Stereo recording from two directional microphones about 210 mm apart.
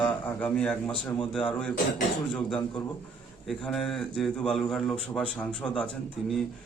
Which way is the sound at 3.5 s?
Centre (ahead or behind).